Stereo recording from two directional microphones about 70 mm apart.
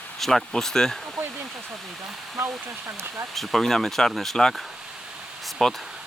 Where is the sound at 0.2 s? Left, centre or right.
Centre.